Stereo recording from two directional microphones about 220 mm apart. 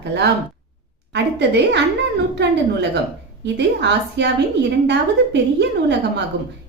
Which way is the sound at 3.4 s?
50° right (ahead or behind).